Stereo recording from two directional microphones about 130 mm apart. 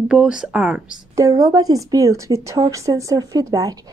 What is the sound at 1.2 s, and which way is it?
A woman's voice, 25° right (ahead or behind).